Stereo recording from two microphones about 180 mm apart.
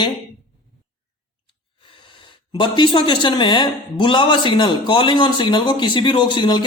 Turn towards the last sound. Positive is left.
turn(degrees=25)  # may be behind; listen again after turning